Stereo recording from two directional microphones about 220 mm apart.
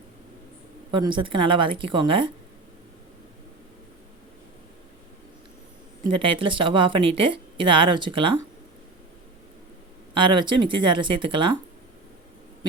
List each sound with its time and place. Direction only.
0.9 s a woman's voice: 20° right (ahead or behind)
6.1 s a woman's voice: 25° right (ahead or behind)
10.2 s a woman's voice: 20° right (ahead or behind)